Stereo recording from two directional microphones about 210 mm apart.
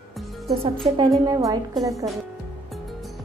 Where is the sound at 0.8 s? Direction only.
20° right (ahead or behind).